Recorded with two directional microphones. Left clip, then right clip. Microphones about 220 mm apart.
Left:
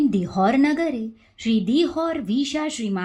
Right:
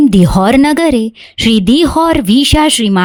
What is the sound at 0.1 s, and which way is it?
Speech, 50° right (ahead or behind).